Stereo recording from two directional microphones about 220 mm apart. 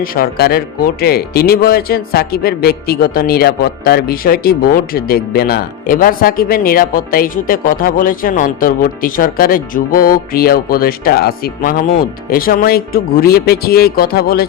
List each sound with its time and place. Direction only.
0.0 s speech: 40° left (ahead or behind)